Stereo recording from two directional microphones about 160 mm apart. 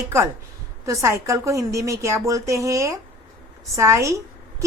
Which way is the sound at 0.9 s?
20° right (ahead or behind).